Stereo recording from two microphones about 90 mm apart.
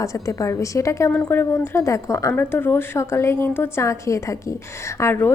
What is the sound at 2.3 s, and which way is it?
A woman's voice, 25° left (ahead or behind).